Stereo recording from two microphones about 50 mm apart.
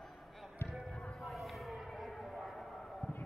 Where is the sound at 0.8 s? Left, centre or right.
Centre.